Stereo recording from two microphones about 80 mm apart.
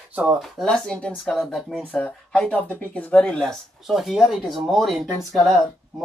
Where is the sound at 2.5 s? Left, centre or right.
Centre.